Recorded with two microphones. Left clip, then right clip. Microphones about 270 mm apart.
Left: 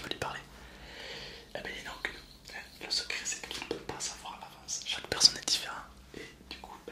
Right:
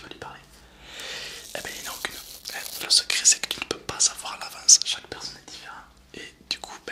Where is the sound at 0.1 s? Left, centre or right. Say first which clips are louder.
Left 4 dB; centre.